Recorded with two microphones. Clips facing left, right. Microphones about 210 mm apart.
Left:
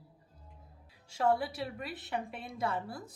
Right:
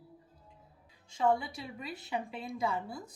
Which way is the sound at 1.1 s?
5° left (ahead or behind).